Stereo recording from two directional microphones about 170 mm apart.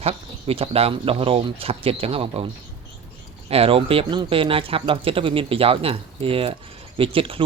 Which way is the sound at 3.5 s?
35° right (ahead or behind).